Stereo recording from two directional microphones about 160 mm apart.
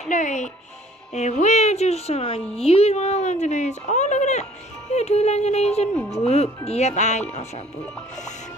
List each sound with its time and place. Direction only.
0.1 s music: 50° left (ahead or behind)
1.1 s speech: 45° left (ahead or behind)